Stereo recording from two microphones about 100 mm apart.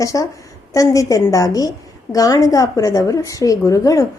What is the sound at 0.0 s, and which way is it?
A woman's voice, 30° left (ahead or behind).